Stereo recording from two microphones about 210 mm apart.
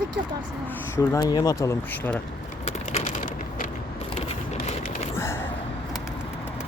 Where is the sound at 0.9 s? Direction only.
15° left (ahead or behind).